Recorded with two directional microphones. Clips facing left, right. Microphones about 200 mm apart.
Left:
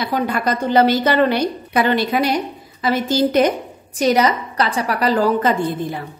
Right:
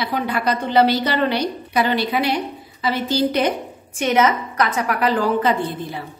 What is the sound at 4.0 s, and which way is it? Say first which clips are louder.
A woman's voice: left 2 dB; 35° left (ahead or behind).